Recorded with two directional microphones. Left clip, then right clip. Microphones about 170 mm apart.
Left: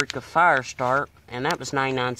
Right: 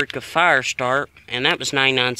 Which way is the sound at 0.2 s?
30° right (ahead or behind).